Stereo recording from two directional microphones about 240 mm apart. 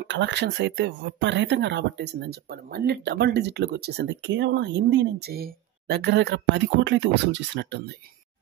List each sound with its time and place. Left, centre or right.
0.0 s speech: right